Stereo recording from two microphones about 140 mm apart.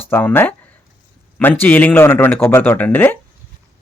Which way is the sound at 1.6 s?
10° left (ahead or behind).